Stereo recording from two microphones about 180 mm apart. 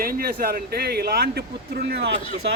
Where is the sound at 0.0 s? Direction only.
55° right (ahead or behind).